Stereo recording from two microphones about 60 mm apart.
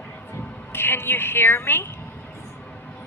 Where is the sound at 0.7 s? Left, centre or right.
Left.